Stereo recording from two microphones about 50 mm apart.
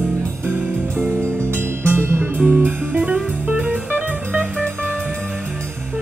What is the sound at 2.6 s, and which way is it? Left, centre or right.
Music, right.